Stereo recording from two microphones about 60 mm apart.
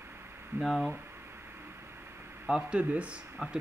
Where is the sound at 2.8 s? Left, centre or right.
Right.